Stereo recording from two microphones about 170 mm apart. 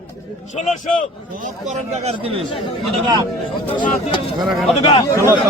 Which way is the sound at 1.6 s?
40° right (ahead or behind).